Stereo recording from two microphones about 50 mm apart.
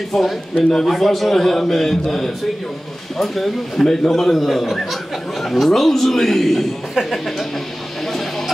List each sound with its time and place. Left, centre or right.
0.1 s a man's voice: centre